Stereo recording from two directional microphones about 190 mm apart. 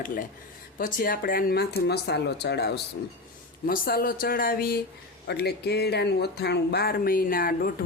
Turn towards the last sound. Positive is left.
turn(degrees=50)  # may be behind; listen again after turning